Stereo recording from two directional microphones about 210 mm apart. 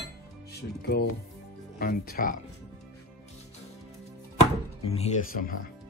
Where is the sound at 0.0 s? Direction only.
50° left (ahead or behind).